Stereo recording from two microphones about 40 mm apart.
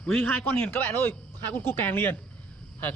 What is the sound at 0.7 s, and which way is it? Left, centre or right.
Speech, left.